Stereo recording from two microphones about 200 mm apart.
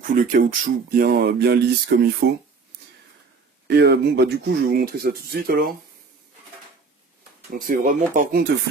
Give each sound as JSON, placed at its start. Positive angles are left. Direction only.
{"t": 0.1, "sound": "speech", "side_deg": -40}
{"t": 3.6, "sound": "speech", "side_deg": -60}
{"t": 7.5, "sound": "speech", "side_deg": -45}